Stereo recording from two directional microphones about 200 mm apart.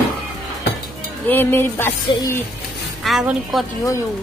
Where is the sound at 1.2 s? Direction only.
10° left (ahead or behind).